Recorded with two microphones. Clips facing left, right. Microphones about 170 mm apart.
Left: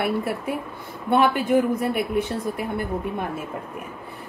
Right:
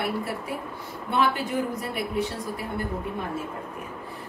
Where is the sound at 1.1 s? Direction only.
55° left (ahead or behind).